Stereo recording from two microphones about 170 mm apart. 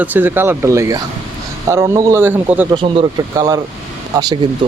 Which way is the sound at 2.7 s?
35° right (ahead or behind).